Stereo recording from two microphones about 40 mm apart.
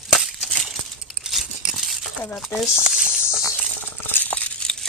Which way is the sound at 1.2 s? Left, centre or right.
Centre.